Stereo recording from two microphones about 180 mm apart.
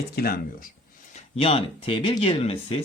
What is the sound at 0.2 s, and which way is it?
Speech, 55° left (ahead or behind).